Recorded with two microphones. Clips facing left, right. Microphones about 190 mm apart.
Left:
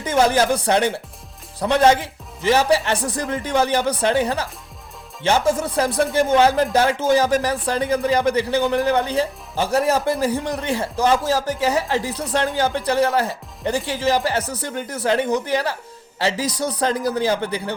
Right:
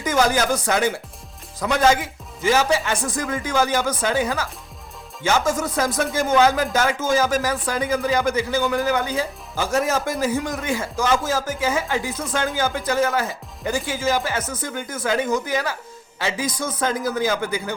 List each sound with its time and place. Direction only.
0.0 s speech: 30° left (ahead or behind)